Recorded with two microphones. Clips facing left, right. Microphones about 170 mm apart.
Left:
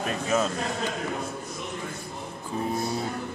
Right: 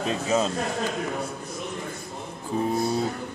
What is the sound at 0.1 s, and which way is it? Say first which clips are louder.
Speech: right 2 dB; 25° right (ahead or behind).